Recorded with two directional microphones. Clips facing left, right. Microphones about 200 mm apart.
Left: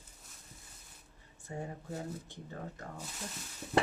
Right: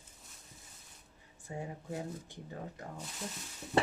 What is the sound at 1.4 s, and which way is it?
Speech, 15° right (ahead or behind).